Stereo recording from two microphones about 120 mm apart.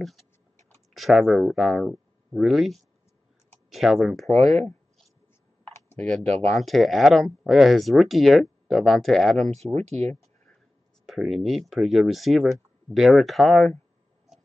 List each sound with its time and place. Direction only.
0.9 s speech: centre (ahead or behind)
5.7 s clicking: 20° left (ahead or behind)
6.2 s speech: 65° right (ahead or behind)
6.6 s speech: centre (ahead or behind)
9.5 s speech: 65° right (ahead or behind)
11.1 s speech: centre (ahead or behind)